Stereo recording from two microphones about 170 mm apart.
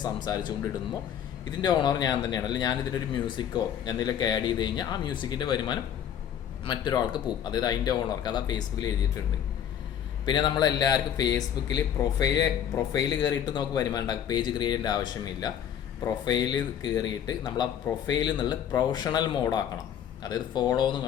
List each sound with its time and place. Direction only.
0.0 s a man's voice: 25° left (ahead or behind)
10.2 s a man's voice: 25° left (ahead or behind)